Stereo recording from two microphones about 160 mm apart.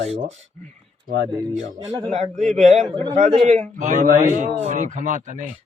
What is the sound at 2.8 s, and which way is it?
Speech, 25° right (ahead or behind).